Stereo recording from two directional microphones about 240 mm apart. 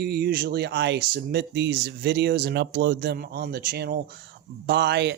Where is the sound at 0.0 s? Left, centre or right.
Right.